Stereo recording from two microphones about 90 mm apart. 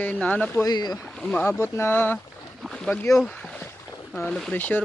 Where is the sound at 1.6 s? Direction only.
25° left (ahead or behind).